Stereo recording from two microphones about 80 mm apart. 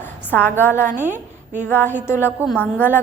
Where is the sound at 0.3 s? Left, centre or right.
Left.